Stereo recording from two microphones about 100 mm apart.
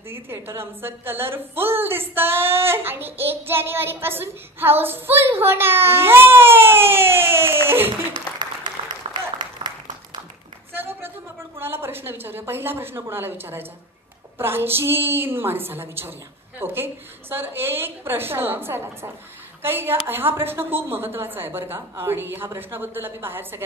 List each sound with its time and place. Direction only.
0.1 s a woman's voice: 25° right (ahead or behind)
8.4 s applause: 45° right (ahead or behind)
8.8 s applause: 75° right (ahead or behind)
9.6 s a sound: 50° right (ahead or behind)
10.7 s a sound: 25° right (ahead or behind)
11.5 s a woman's voice: 25° right (ahead or behind)